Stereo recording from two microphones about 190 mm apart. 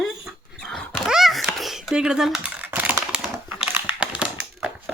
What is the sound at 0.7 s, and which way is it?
Thunk, centre (ahead or behind).